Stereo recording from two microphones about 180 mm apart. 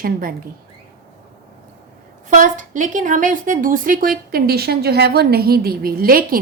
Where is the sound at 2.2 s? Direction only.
45° right (ahead or behind).